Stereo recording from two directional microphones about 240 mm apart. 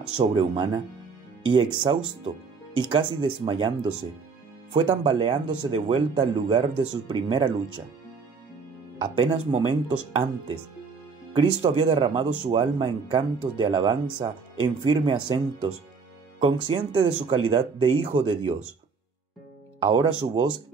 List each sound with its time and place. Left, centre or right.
0.2 s speech: centre
8.9 s speech: centre
11.3 s speech: centre
19.8 s speech: centre